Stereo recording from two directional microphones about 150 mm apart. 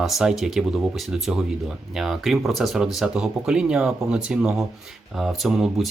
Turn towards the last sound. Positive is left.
turn(degrees=0)  # may be behind; listen again after turning